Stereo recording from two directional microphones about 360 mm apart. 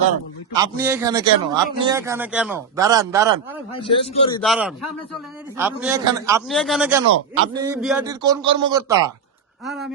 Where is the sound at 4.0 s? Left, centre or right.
Centre.